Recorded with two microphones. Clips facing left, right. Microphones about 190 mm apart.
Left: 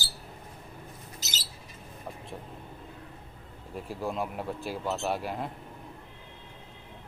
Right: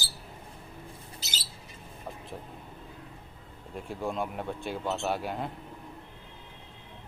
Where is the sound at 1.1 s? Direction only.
45° left (ahead or behind).